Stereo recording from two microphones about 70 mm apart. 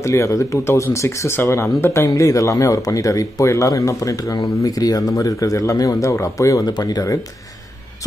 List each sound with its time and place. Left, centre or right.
0.0 s speech: left
6.7 s speech: left